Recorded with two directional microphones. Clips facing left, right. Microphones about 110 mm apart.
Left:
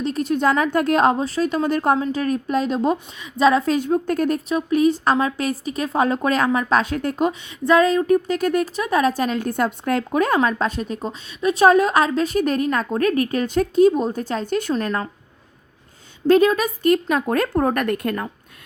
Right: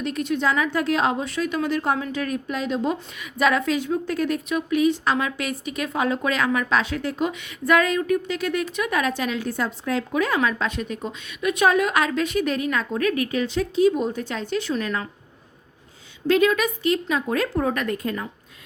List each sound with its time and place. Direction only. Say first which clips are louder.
0.0 s a woman's voice: left 4 dB; 35° left (ahead or behind)
3.2 s a woman's voice: left 5 dB; 30° left (ahead or behind)
3.7 s a woman's voice: left 4 dB; 45° left (ahead or behind)
7.4 s a woman's voice: left 4 dB; 30° left (ahead or behind)
16.2 s speech: left 4 dB; 40° left (ahead or behind); by 18.3 s 60° left (ahead or behind)